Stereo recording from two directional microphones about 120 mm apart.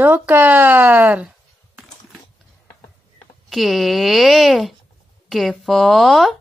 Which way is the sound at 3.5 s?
Centre (ahead or behind).